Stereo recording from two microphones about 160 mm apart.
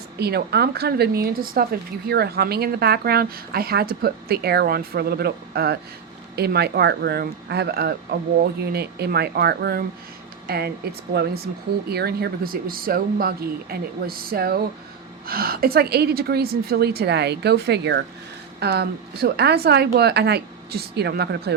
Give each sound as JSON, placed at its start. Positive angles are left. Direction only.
{"t": 0.2, "sound": "a woman's voice", "side_deg": -90}